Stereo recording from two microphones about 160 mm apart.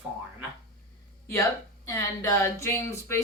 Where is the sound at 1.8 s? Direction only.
15° left (ahead or behind).